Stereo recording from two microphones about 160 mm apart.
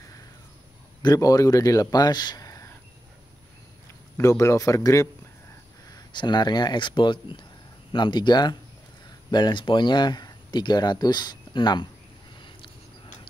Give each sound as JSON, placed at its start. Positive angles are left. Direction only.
{"t": 1.0, "sound": "speech", "side_deg": 20}
{"t": 4.2, "sound": "speech", "side_deg": 20}
{"t": 12.4, "sound": "a sound", "side_deg": 30}